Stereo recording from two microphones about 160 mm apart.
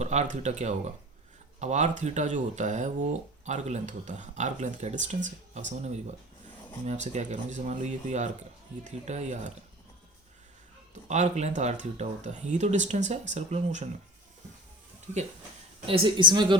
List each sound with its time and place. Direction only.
0.0 s speech: 45° right (ahead or behind)
11.1 s speech: 45° right (ahead or behind)
15.9 s a woman's voice: 30° right (ahead or behind)